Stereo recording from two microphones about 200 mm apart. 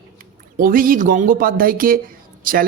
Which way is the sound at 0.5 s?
45° right (ahead or behind).